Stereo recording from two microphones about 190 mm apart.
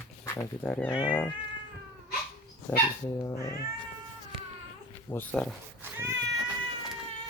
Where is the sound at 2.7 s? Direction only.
15° left (ahead or behind).